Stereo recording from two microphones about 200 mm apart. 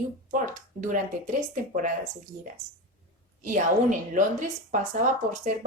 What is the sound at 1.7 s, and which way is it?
A woman's voice, 40° right (ahead or behind).